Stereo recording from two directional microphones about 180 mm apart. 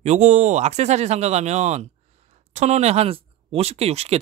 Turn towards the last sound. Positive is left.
turn(degrees=-35)  # may be behind; listen again after turning